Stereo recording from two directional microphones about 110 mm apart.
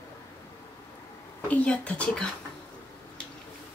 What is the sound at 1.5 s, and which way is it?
Speech, 10° left (ahead or behind).